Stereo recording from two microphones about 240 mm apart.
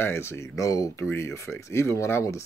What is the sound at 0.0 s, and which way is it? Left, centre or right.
Speech, centre.